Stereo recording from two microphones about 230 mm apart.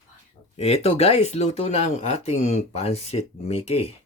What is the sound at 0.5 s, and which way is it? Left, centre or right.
Speech, left.